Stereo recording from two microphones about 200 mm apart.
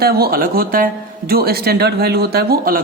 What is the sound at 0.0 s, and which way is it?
Speech, 50° right (ahead or behind).